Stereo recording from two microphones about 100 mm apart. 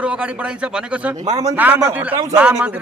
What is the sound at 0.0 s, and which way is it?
Speech, 10° right (ahead or behind).